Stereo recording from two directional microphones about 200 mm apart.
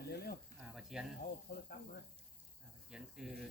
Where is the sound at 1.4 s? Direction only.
50° left (ahead or behind).